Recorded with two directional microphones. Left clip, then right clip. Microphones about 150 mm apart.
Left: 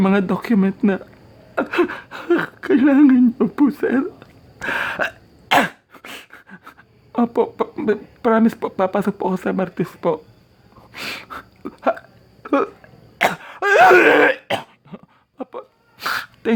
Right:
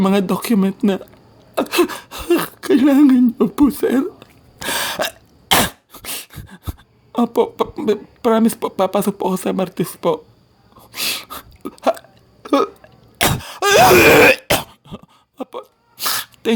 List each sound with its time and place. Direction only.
0.0 s speech: 5° left (ahead or behind)
1.5 s a sound: centre (ahead or behind)
7.7 s speech: 10° left (ahead or behind)
10.8 s hiccup: centre (ahead or behind)
13.1 s wail: 15° right (ahead or behind)
14.1 s speech: 40° right (ahead or behind)
15.4 s a sound: centre (ahead or behind)
16.0 s sneeze: 10° left (ahead or behind)